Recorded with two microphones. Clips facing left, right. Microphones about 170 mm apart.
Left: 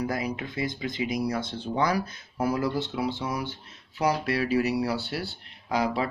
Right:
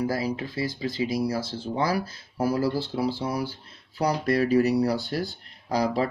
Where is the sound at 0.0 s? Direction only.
30° right (ahead or behind).